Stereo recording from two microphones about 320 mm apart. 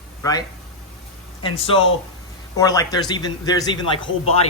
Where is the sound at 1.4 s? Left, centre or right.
Centre.